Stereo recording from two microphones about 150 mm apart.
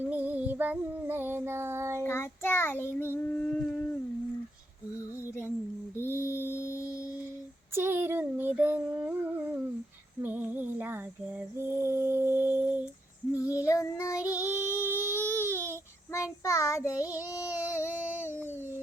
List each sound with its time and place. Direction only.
0.0 s child singing: 10° right (ahead or behind)
2.0 s child singing: 15° left (ahead or behind)
6.0 s mantra: 15° left (ahead or behind)
7.8 s a sound: 15° right (ahead or behind)
10.2 s female singing: 10° right (ahead or behind)
13.3 s child singing: 20° left (ahead or behind)
14.3 s female singing: 20° left (ahead or behind)
14.7 s child singing: 15° left (ahead or behind)